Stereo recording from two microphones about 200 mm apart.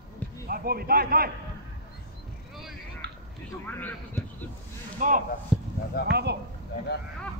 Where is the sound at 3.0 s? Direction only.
55° right (ahead or behind).